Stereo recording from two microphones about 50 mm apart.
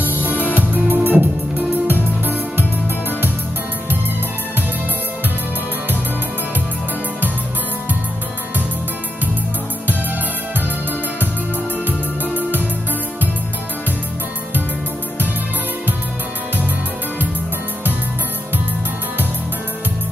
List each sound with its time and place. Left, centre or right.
0.0 s music: right
12.2 s music: left